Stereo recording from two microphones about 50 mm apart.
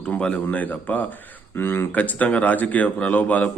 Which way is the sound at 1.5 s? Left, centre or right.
Left.